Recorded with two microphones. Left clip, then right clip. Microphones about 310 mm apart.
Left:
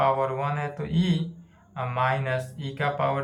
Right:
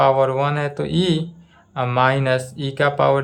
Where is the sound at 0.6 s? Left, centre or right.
Centre.